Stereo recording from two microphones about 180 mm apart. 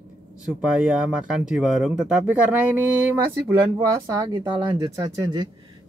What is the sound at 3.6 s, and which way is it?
Speech, 20° right (ahead or behind).